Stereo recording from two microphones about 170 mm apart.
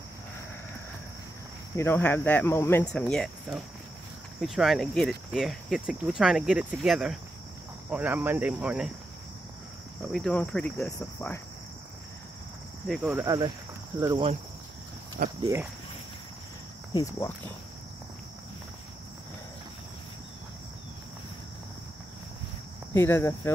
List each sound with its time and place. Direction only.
1.8 s cricket: 10° left (ahead or behind)
2.9 s speech: 5° left (ahead or behind)
10.1 s cricket: 5° left (ahead or behind)
12.8 s speech: centre (ahead or behind)
13.1 s speech: 20° right (ahead or behind)
15.2 s speech: 55° right (ahead or behind)
16.9 s cricket: 20° left (ahead or behind)
22.9 s cricket: 15° left (ahead or behind)